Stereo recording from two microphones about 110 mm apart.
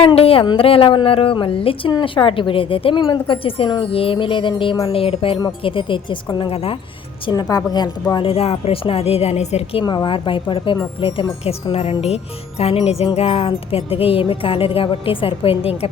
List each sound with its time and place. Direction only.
0.0 s a woman's voice: 60° left (ahead or behind)
4.9 s a woman's voice: 60° left (ahead or behind)
7.5 s a woman's voice: 40° left (ahead or behind)
8.2 s speech: 60° left (ahead or behind); by 9.8 s 75° left (ahead or behind)
9.8 s a woman's voice: 40° left (ahead or behind); by 15.9 s 60° left (ahead or behind)